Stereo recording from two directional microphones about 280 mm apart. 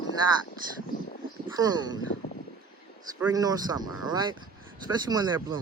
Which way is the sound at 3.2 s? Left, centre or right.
Centre.